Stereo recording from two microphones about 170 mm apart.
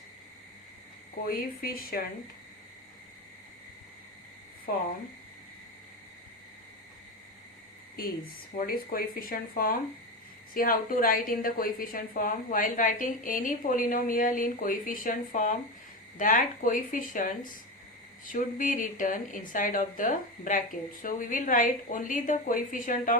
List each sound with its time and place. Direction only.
1.2 s speech: 60° left (ahead or behind)
4.7 s speech: 60° left (ahead or behind)
8.5 s a woman's voice: 60° left (ahead or behind)